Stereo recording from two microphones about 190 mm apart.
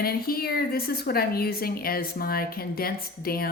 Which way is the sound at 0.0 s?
55° left (ahead or behind).